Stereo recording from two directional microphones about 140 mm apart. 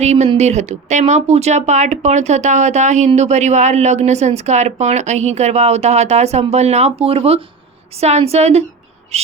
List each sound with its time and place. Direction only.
0.0 s speech: 55° right (ahead or behind)
9.1 s owl: 50° right (ahead or behind)